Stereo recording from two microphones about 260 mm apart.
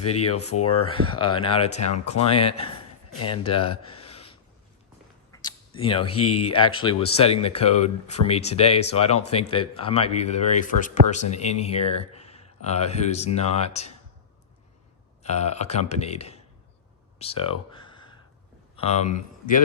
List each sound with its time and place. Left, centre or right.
0.0 s speech: left
0.7 s speech: left
5.3 s a sound: centre
6.7 s speech: centre
15.2 s speech: left
17.2 s a sound: left
18.8 s speech: left